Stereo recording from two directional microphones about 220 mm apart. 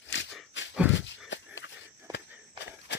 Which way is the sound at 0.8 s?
5° right (ahead or behind).